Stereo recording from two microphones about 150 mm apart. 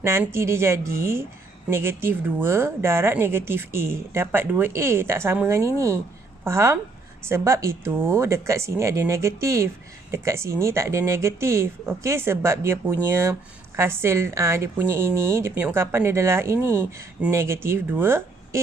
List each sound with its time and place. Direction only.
0.0 s speech: 15° right (ahead or behind)